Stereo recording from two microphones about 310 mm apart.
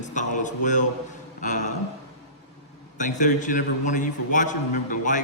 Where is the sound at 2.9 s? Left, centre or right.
Left.